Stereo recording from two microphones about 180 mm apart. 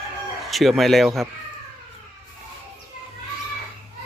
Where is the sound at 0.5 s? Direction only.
Centre (ahead or behind).